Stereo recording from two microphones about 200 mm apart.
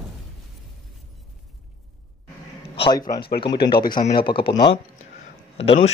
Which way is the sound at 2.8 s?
20° left (ahead or behind).